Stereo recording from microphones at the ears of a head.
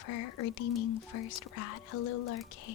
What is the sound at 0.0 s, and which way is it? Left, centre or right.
Speech, left.